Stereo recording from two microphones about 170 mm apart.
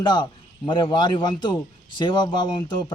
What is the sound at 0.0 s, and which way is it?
A man's voice, 25° left (ahead or behind).